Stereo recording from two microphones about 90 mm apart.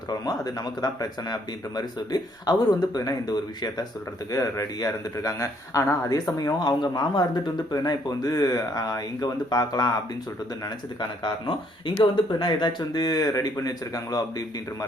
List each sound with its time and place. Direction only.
0.1 s a man's voice: 45° left (ahead or behind)
11.0 s speech: 60° left (ahead or behind); by 14.8 s 40° left (ahead or behind)